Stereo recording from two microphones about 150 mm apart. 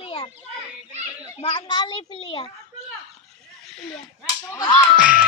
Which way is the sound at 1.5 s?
35° left (ahead or behind).